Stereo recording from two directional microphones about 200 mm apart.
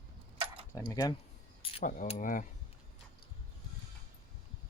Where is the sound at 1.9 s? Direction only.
40° left (ahead or behind).